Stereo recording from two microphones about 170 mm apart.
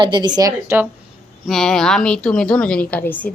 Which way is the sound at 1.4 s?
Centre (ahead or behind).